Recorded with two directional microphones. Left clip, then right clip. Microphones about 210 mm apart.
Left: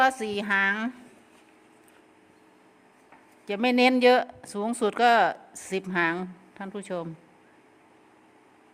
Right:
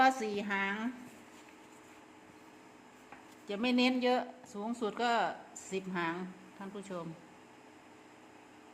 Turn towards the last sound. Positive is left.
turn(degrees=55)  # may be behind; listen again after turning